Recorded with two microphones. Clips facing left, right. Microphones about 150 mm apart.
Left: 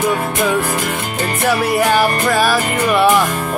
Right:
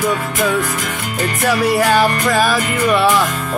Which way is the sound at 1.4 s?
5° left (ahead or behind).